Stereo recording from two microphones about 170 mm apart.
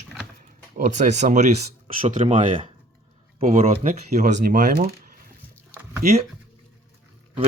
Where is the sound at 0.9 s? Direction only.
45° right (ahead or behind).